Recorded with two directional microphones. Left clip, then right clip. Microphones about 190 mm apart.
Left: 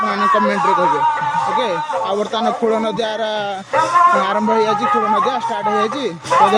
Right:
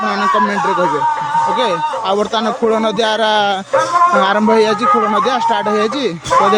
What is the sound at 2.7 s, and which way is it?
Speech, 20° right (ahead or behind).